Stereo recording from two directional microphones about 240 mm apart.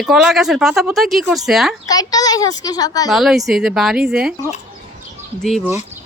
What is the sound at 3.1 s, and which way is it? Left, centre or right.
Speech, centre.